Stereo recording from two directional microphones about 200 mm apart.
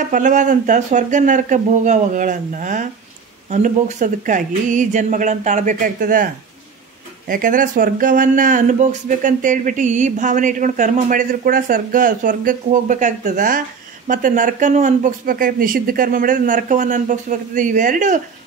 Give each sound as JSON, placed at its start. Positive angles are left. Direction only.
{"t": 0.1, "sound": "speech", "side_deg": -40}